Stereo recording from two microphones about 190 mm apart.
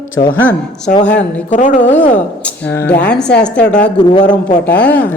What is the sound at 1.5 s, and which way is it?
Speech, 40° left (ahead or behind).